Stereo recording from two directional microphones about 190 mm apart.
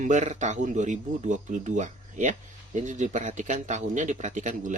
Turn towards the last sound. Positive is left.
turn(degrees=-40)  # may be behind; listen again after turning